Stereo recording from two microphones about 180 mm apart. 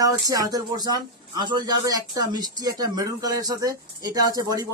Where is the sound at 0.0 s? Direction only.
20° right (ahead or behind).